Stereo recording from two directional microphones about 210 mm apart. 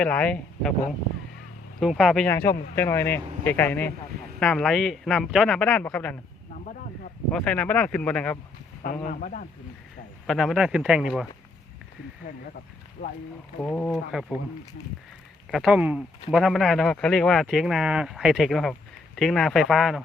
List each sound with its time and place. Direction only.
0.0 s speech: 5° left (ahead or behind)
1.8 s speech: centre (ahead or behind)
2.3 s speech: 10° left (ahead or behind)
7.3 s speech: 5° left (ahead or behind)
9.0 s speech: 40° left (ahead or behind)
10.2 s speech: centre (ahead or behind)
13.6 s speech: 5° left (ahead or behind)
15.4 s speech: centre (ahead or behind)